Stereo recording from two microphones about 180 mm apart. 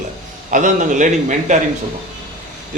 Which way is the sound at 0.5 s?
45° right (ahead or behind).